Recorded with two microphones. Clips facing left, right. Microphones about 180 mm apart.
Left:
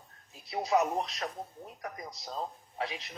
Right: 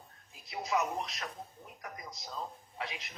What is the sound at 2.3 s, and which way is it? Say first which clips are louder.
Speech: left 4 dB; 30° left (ahead or behind).